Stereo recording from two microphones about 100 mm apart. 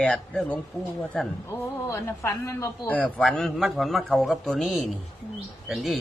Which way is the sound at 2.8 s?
15° left (ahead or behind).